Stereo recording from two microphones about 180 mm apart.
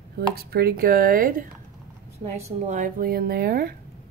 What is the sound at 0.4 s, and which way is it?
Speech, 60° right (ahead or behind).